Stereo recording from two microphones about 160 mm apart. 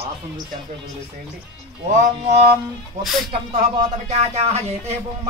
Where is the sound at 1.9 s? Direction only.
50° right (ahead or behind).